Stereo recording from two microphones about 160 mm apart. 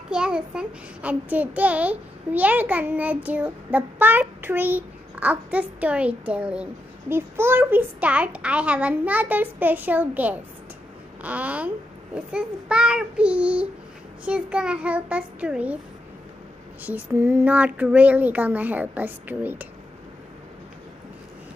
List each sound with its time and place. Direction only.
0.1 s a child's voice: 5° right (ahead or behind)
16.8 s a child's voice: 10° right (ahead or behind)